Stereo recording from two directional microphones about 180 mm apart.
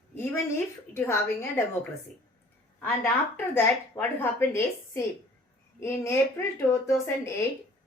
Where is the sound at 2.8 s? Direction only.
10° left (ahead or behind).